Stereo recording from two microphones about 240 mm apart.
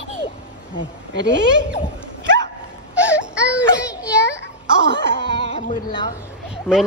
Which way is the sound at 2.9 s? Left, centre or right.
Centre.